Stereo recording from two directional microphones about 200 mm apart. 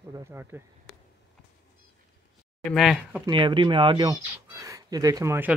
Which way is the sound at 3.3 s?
25° right (ahead or behind).